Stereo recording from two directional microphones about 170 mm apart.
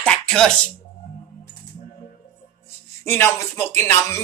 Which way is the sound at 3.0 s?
15° left (ahead or behind).